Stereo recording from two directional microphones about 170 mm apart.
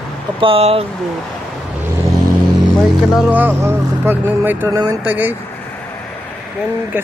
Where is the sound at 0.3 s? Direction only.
30° right (ahead or behind).